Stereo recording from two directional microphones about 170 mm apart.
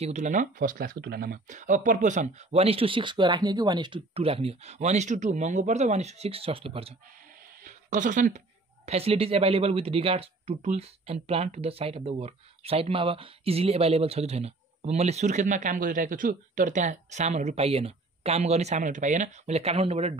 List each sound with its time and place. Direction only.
0.0 s speech: 45° right (ahead or behind)
7.6 s speech: 50° right (ahead or behind)
8.8 s speech: 35° right (ahead or behind)